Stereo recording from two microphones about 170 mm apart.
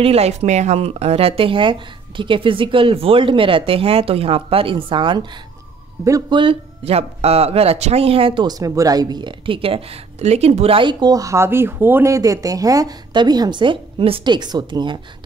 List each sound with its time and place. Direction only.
0.0 s speech: 35° right (ahead or behind)